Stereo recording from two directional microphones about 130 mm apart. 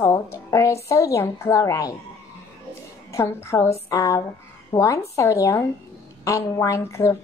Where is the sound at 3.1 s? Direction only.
20° left (ahead or behind).